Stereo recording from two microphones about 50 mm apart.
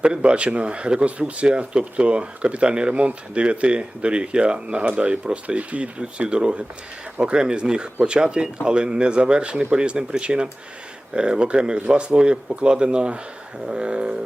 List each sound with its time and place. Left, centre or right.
0.0 s speech: right